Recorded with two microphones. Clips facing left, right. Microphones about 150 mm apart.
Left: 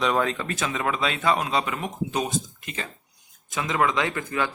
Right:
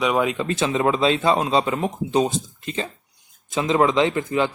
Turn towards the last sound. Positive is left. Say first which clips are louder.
# right 7 dB
turn(degrees=-25)  # may be behind; listen again after turning